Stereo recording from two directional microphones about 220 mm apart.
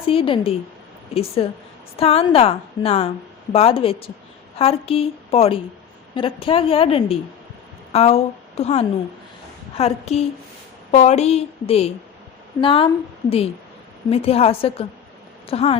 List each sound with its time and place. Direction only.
0.0 s a woman's voice: 25° left (ahead or behind)
14.1 s a woman's voice: 25° left (ahead or behind)